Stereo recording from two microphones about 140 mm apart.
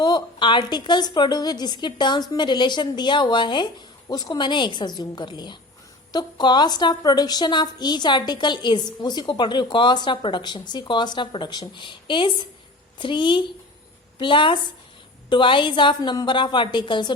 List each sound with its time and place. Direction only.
0.0 s a woman's voice: 35° left (ahead or behind)